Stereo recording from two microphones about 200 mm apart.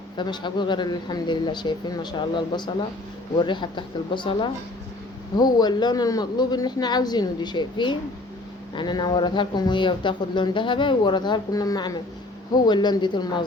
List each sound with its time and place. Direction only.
0.2 s speech: 20° left (ahead or behind)